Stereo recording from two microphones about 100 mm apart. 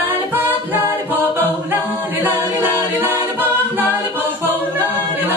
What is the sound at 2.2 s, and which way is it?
A capella, 20° right (ahead or behind).